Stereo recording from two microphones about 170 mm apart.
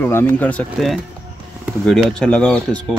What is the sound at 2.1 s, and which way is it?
Speech, 5° left (ahead or behind).